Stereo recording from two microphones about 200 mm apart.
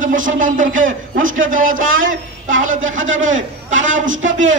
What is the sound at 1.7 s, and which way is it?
Speech, 80° right.